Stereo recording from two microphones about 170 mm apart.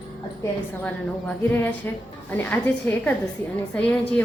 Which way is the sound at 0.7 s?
10° left (ahead or behind).